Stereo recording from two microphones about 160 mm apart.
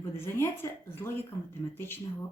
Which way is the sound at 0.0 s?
15° left (ahead or behind).